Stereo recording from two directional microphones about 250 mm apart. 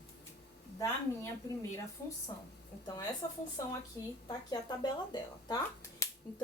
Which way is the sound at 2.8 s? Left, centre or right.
Centre.